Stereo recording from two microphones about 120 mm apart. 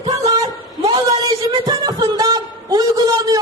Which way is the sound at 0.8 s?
30° right (ahead or behind).